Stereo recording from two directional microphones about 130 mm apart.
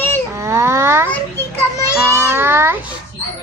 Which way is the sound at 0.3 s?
20° right (ahead or behind).